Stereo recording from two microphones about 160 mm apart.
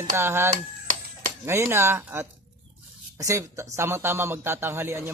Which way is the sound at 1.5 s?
15° right (ahead or behind).